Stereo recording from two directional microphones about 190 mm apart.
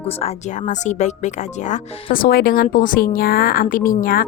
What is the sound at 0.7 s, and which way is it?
Speech, 40° left (ahead or behind).